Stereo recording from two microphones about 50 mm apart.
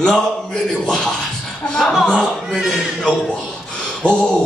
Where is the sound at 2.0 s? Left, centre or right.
Centre.